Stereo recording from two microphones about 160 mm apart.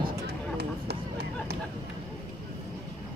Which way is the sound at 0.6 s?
90° right.